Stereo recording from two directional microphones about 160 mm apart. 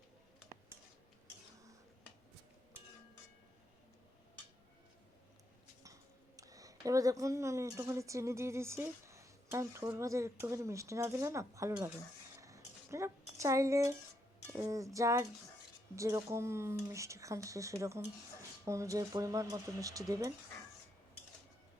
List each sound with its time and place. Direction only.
5.8 s speech: 20° right (ahead or behind)
12.4 s a sound: 20° right (ahead or behind)
14.5 s speech: 20° right (ahead or behind)